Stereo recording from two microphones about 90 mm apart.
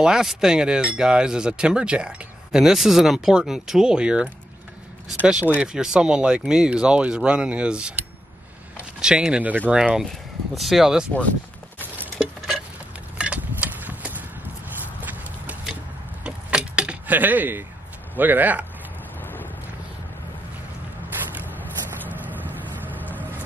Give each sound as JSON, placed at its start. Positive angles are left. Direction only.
{"t": 0.0, "sound": "chink", "side_deg": -5}
{"t": 9.0, "sound": "chink", "side_deg": -10}
{"t": 10.0, "sound": "speech", "side_deg": 0}
{"t": 12.2, "sound": "a sound", "side_deg": -10}
{"t": 13.2, "sound": "horse", "side_deg": -15}
{"t": 16.3, "sound": "keys jangling", "side_deg": -10}
{"t": 18.1, "sound": "speech", "side_deg": -20}
{"t": 19.2, "sound": "vehicle", "side_deg": 20}
{"t": 22.9, "sound": "vehicle", "side_deg": 20}